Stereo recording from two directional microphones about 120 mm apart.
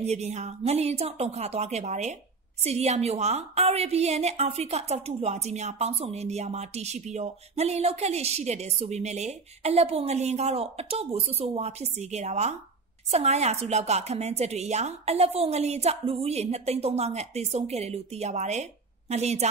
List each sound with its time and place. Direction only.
0.0 s a woman's voice: 65° right (ahead or behind)
2.6 s a woman's voice: 60° right (ahead or behind)